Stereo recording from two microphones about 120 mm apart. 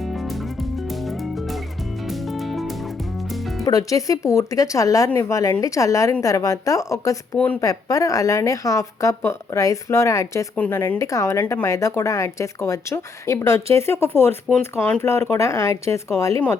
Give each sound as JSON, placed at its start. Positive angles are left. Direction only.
{"t": 2.0, "sound": "music", "side_deg": 0}
{"t": 3.7, "sound": "speech", "side_deg": 30}
{"t": 7.3, "sound": "speech", "side_deg": 10}
{"t": 7.6, "sound": "speech", "side_deg": 30}